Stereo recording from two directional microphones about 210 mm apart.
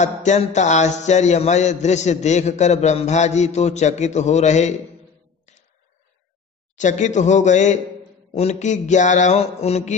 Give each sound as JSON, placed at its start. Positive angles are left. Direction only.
{"t": 0.0, "sound": "a man's voice", "side_deg": 35}
{"t": 6.8, "sound": "a man's voice", "side_deg": 35}